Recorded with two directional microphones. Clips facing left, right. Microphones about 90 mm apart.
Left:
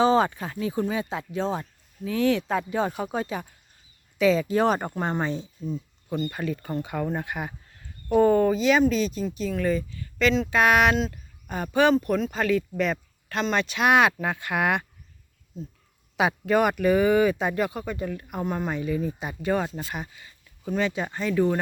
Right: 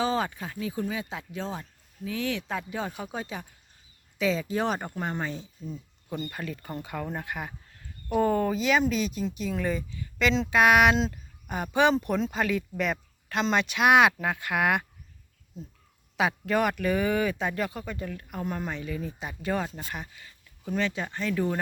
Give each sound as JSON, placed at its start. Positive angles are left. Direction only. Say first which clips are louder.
{"t": 0.0, "sound": "a sound", "louder": "left 7 dB", "side_deg": 35}
{"t": 0.3, "sound": "speech", "louder": "left 4 dB", "side_deg": 45}
{"t": 5.1, "sound": "speech", "louder": "left 5 dB", "side_deg": 20}
{"t": 6.3, "sound": "speech", "louder": "left 6 dB", "side_deg": 5}
{"t": 16.1, "sound": "speech", "louder": "left 4 dB", "side_deg": 5}